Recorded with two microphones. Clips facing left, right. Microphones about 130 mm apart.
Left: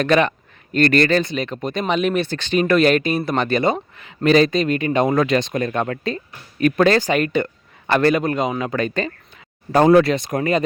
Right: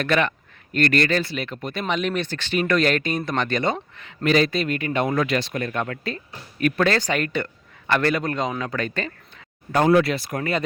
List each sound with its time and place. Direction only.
0.0 s speech: 20° left (ahead or behind); by 1.2 s 35° left (ahead or behind)
1.2 s speech: 20° left (ahead or behind)
4.2 s speech: 30° left (ahead or behind)
5.8 s speech: 35° left (ahead or behind)
9.7 s speech: 30° left (ahead or behind)